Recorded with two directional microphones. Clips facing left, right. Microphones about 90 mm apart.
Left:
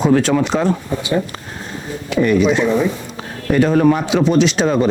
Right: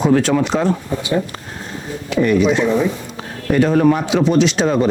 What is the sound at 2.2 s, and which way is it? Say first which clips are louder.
Speech: even; 15° left (ahead or behind).